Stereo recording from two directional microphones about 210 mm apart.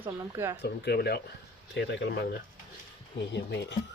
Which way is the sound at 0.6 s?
50° left (ahead or behind).